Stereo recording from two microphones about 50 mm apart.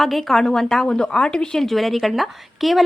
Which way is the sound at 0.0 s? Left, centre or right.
Centre.